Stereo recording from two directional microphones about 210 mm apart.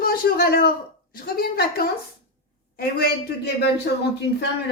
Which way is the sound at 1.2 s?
45° left (ahead or behind).